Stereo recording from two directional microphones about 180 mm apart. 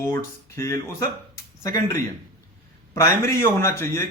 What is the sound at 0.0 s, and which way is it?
A man's voice, 15° left (ahead or behind).